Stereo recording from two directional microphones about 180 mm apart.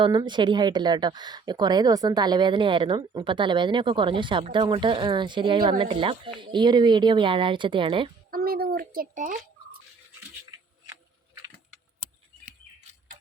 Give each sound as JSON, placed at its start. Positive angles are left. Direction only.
{"t": 0.0, "sound": "speech", "side_deg": -25}
{"t": 8.3, "sound": "speech", "side_deg": -55}